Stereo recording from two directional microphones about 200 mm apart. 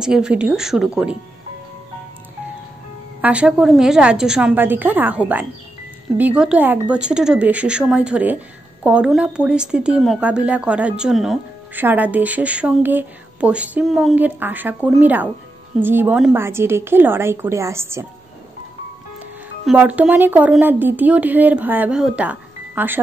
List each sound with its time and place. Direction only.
0.0 s a woman's voice: 5° right (ahead or behind)
3.2 s a woman's voice: 5° right (ahead or behind)
19.6 s speech: 5° right (ahead or behind)